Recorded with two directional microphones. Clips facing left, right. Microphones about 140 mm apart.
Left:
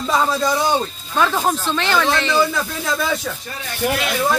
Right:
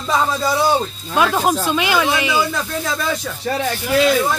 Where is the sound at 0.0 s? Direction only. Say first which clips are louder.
Even; centre (ahead or behind).